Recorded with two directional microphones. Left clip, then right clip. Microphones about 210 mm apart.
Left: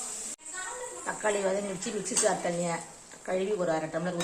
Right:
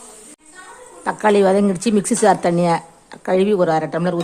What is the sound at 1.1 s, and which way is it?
A woman's voice, 50° right (ahead or behind).